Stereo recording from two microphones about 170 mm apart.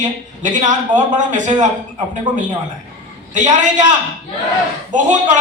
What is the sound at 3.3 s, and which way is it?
Speech, 45° right (ahead or behind).